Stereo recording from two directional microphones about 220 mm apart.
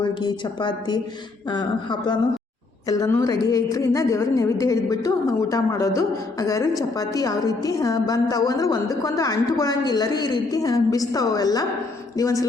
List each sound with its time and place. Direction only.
0.0 s a woman's voice: 20° left (ahead or behind)